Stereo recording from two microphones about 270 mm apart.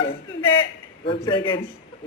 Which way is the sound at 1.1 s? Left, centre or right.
Centre.